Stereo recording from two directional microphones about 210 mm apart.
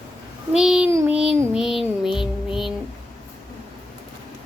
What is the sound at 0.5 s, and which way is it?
Child singing, 5° right (ahead or behind).